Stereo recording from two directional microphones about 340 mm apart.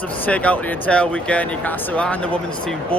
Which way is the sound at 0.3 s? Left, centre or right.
Centre.